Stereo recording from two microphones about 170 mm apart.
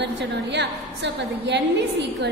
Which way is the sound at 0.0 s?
90° right.